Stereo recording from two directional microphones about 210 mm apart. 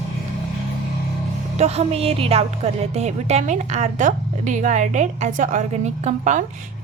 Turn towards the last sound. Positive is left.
turn(degrees=-35)  # may be behind; listen again after turning